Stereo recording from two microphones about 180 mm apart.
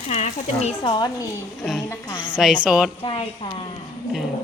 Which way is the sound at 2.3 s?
5° right (ahead or behind).